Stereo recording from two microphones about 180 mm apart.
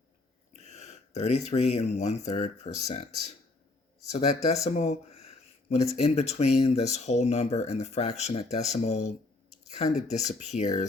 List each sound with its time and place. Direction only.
0.5 s speech: 40° left (ahead or behind)
4.6 s a sound: 40° left (ahead or behind)
6.0 s speech: 35° left (ahead or behind)